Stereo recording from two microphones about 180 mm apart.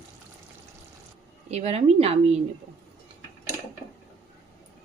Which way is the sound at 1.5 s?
35° right (ahead or behind).